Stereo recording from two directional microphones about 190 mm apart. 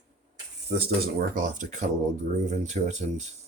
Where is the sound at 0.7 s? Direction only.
50° right (ahead or behind).